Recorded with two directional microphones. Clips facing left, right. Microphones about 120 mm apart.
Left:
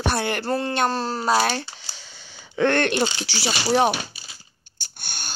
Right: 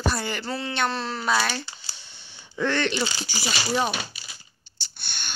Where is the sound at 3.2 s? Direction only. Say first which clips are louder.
Left 3 dB; 80° left.